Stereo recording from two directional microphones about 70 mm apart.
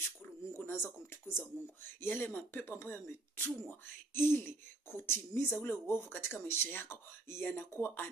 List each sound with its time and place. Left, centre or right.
0.5 s bird: left
1.1 s speech: left